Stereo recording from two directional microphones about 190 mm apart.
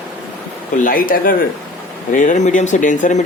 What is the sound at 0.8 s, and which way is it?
Speech, 45° left (ahead or behind).